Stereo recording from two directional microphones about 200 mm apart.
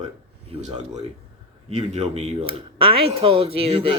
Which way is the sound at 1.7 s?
35° right (ahead or behind).